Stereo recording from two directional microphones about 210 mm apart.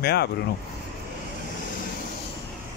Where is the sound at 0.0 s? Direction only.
50° left (ahead or behind).